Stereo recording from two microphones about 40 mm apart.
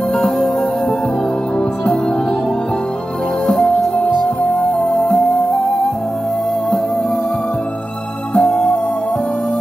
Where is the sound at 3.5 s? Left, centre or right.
Left.